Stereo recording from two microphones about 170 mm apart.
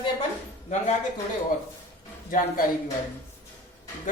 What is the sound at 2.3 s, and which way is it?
Speech, 50° left (ahead or behind).